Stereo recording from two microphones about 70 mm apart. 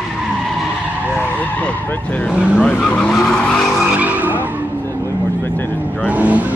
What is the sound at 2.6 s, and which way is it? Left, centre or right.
Speech, centre.